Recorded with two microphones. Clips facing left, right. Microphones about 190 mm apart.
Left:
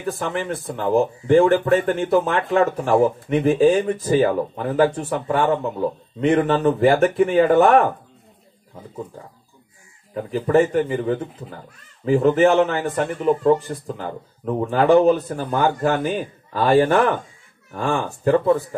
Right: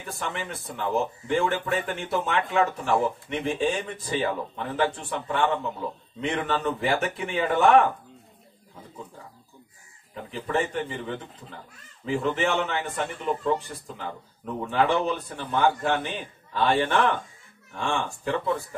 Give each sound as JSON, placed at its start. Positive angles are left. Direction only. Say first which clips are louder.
{"t": 0.2, "sound": "speech", "louder": "left 8 dB", "side_deg": 40}
{"t": 10.1, "sound": "speech", "louder": "left 10 dB", "side_deg": 45}